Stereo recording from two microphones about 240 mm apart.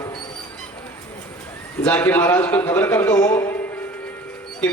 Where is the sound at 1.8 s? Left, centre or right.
Centre.